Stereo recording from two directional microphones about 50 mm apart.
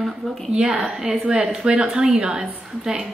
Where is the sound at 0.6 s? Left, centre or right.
Right.